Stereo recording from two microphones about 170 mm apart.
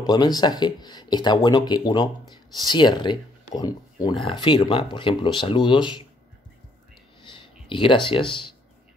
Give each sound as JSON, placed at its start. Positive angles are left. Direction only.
{"t": 0.0, "sound": "speech", "side_deg": 25}
{"t": 7.2, "sound": "clicking", "side_deg": 30}
{"t": 7.6, "sound": "speech", "side_deg": 30}